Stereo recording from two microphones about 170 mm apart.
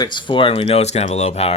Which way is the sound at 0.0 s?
25° left (ahead or behind).